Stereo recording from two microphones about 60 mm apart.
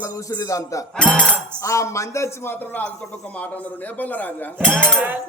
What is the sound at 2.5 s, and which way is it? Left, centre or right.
A man's voice, left.